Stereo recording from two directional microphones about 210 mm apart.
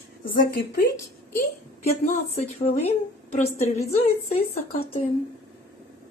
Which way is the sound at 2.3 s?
30° left (ahead or behind).